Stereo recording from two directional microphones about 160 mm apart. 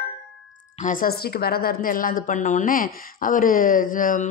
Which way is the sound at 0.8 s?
60° left (ahead or behind).